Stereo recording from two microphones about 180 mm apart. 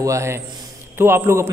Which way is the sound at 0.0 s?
15° right (ahead or behind).